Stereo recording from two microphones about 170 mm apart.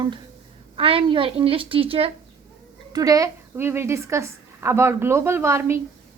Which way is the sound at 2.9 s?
20° right (ahead or behind).